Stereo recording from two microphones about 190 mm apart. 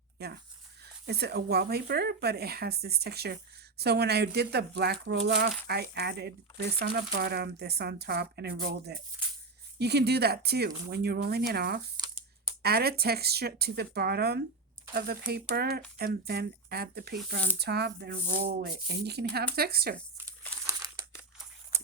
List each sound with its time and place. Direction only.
0.2 s speech: 55° right (ahead or behind)
20.7 s crumpling: 15° right (ahead or behind)